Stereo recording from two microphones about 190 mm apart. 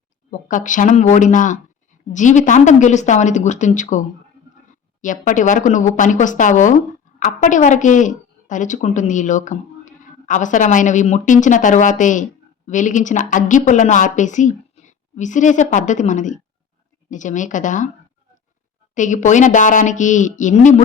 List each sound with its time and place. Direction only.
0.3 s a woman's voice: 45° left (ahead or behind)
18.9 s a woman's voice: 40° left (ahead or behind)